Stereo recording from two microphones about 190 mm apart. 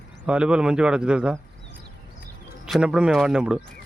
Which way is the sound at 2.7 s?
Centre (ahead or behind).